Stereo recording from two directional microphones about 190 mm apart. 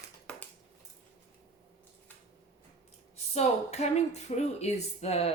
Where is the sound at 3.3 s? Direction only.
35° left (ahead or behind).